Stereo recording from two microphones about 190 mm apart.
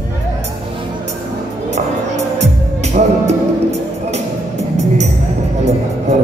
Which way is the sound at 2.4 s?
35° right (ahead or behind).